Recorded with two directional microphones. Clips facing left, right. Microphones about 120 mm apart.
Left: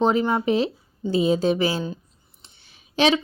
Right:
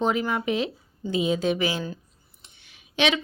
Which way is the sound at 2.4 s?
30° left (ahead or behind).